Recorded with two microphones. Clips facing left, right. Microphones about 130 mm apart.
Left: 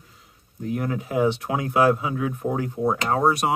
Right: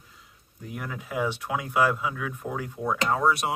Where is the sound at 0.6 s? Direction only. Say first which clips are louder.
Left 10 dB; 45° left (ahead or behind).